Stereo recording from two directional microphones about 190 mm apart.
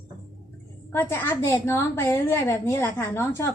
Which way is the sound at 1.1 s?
15° left (ahead or behind).